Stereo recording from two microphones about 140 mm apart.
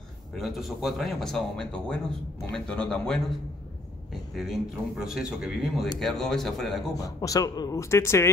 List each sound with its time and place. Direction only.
0.4 s speech: centre (ahead or behind)
7.0 s speech: 25° left (ahead or behind)